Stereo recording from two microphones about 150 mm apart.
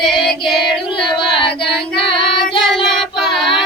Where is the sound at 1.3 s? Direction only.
35° left (ahead or behind).